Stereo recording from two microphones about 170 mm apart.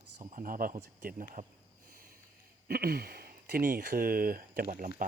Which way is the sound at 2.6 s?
60° right (ahead or behind).